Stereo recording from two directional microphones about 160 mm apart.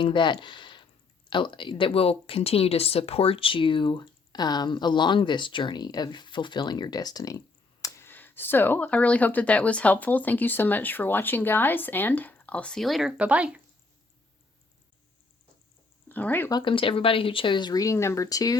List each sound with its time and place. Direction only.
0.0 s speech: 30° left (ahead or behind); by 13.6 s 10° right (ahead or behind)
16.0 s speech: 10° left (ahead or behind)
16.5 s speech: 30° left (ahead or behind)